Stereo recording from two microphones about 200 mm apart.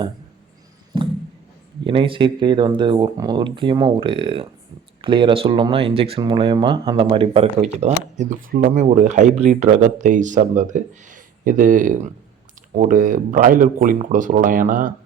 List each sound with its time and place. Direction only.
1.9 s speech: 25° right (ahead or behind); by 14.9 s 40° right (ahead or behind)